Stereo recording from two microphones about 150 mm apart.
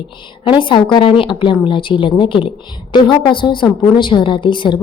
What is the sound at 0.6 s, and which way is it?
Speech, 35° left (ahead or behind).